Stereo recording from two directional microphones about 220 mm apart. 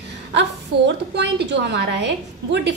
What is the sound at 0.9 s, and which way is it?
A woman's voice, 50° right (ahead or behind).